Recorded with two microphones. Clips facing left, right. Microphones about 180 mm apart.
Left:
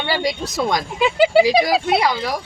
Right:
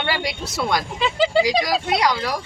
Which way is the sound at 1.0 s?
10° left (ahead or behind).